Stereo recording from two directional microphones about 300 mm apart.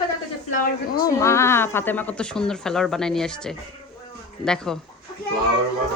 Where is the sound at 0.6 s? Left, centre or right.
Left.